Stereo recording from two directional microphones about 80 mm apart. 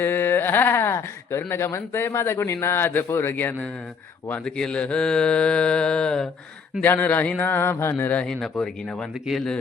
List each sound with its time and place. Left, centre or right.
0.0 s speech: left
4.4 s mantra: centre
6.8 s speech: left
8.2 s mantra: centre
9.2 s speech: centre